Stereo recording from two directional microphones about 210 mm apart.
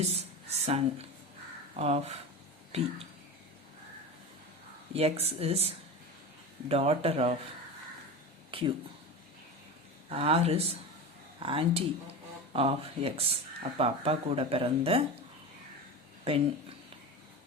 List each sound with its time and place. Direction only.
0.0 s speech: 30° right (ahead or behind)
4.9 s speech: 30° right (ahead or behind)
8.4 s a sound: 25° right (ahead or behind)
10.1 s speech: 30° right (ahead or behind)
16.2 s speech: 25° right (ahead or behind)